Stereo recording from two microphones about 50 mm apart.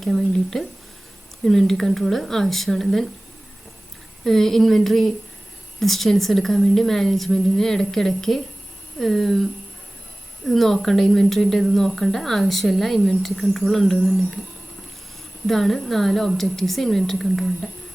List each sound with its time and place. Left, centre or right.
0.0 s speech: centre
4.2 s a woman's voice: centre
15.4 s speech: centre